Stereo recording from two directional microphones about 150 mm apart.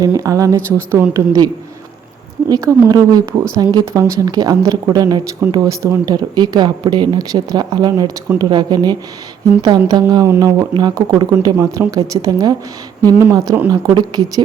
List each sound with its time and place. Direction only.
0.0 s speech: 25° right (ahead or behind)
2.5 s speech: 20° right (ahead or behind)